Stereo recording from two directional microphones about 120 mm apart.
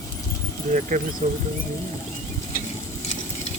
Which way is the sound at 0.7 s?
90° right.